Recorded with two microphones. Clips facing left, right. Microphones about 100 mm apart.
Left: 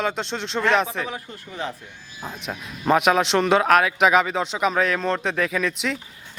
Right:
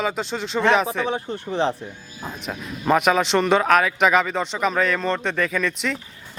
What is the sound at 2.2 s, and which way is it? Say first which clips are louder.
Speech: right 1 dB; 5° right (ahead or behind).